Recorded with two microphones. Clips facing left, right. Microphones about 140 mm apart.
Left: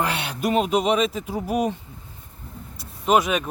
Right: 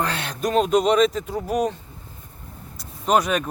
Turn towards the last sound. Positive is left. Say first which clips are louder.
# even
turn(degrees=0)  # may be behind; listen again after turning